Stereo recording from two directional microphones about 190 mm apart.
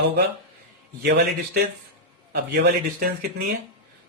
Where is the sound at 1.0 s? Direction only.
60° right (ahead or behind).